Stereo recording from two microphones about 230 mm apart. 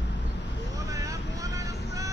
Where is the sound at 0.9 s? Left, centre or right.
Centre.